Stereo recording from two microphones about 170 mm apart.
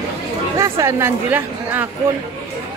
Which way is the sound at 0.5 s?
15° right (ahead or behind).